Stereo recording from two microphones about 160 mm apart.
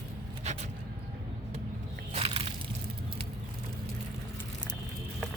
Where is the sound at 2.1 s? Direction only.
40° right (ahead or behind).